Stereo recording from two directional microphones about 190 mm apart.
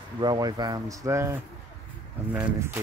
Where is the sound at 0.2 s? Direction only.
20° right (ahead or behind).